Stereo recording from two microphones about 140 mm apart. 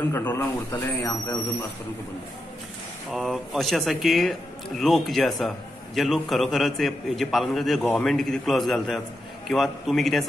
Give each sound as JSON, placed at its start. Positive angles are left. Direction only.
{"t": 0.1, "sound": "a man's voice", "side_deg": 15}
{"t": 3.1, "sound": "speech", "side_deg": 0}